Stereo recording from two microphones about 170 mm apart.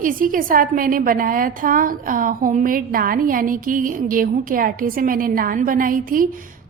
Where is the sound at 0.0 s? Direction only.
55° right (ahead or behind).